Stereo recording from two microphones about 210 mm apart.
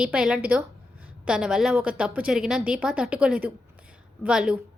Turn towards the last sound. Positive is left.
turn(degrees=-5)  # may be behind; listen again after turning